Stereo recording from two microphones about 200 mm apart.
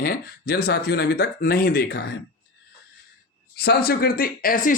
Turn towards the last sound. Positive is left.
turn(degrees=45)  # may be behind; listen again after turning